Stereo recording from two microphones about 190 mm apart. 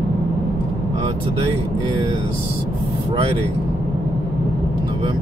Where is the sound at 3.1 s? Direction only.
25° right (ahead or behind).